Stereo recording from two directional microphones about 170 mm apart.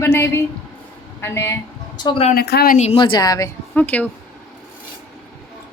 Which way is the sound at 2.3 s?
70° left (ahead or behind).